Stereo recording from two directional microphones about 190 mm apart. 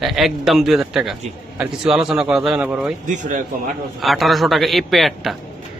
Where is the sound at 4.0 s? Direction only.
Centre (ahead or behind).